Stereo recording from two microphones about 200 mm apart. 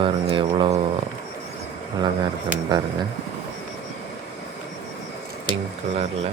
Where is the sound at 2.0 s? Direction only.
20° right (ahead or behind).